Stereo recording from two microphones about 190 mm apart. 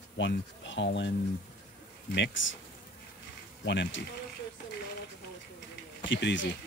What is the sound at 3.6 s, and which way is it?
Speech, 65° left (ahead or behind).